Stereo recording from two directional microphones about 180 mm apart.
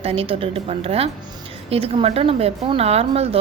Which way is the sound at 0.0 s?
30° right (ahead or behind).